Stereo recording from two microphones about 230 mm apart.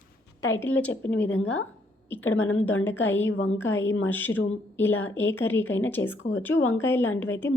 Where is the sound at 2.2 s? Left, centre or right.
Left.